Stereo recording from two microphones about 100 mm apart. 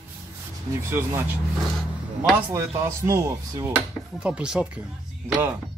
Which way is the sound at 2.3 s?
25° right (ahead or behind).